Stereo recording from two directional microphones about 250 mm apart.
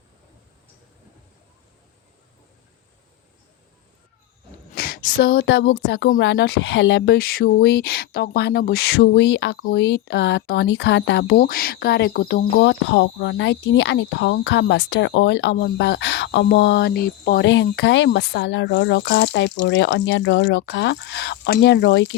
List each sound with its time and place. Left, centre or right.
4.7 s a woman's voice: left